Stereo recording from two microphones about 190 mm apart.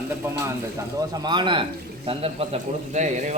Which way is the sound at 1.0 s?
20° right (ahead or behind).